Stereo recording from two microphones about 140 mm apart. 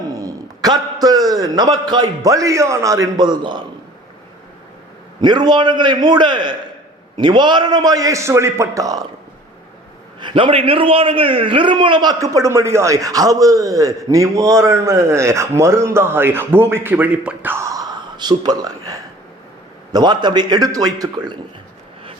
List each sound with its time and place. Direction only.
0.1 s a man's voice: 25° right (ahead or behind)
5.2 s a man's voice: 30° right (ahead or behind)
10.2 s a man's voice: 35° right (ahead or behind)